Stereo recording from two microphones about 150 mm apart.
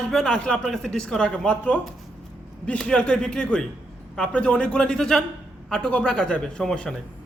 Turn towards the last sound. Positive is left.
turn(degrees=5)  # may be behind; listen again after turning